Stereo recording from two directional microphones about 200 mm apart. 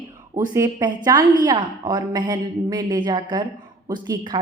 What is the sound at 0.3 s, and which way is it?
A woman's voice, 15° right (ahead or behind).